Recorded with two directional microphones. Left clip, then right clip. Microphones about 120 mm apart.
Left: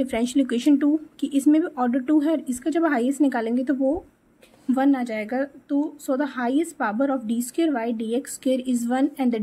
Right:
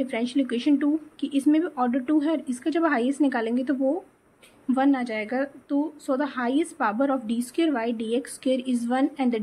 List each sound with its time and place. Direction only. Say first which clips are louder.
0.0 s a woman's voice: left 3 dB; 55° left (ahead or behind); by 9.4 s 35° left (ahead or behind)